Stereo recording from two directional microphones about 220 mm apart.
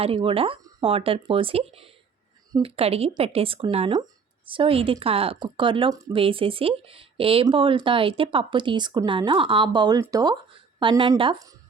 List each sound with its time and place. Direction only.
0.0 s a woman's voice: 25° right (ahead or behind)